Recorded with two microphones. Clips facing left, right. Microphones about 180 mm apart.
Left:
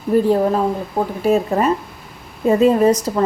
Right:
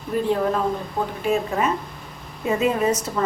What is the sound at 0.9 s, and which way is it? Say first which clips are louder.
A woman's voice: left 8 dB; 40° left (ahead or behind).